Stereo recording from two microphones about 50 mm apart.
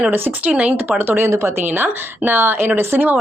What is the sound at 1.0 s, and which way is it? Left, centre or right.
Speech, right.